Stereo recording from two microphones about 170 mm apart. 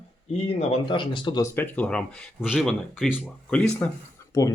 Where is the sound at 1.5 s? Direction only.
10° left (ahead or behind).